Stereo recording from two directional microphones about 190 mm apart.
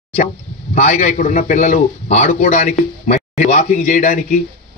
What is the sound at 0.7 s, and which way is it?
A man's voice, 40° left (ahead or behind).